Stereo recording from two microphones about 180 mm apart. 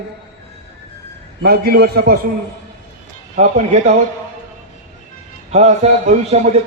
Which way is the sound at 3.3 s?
40° right (ahead or behind).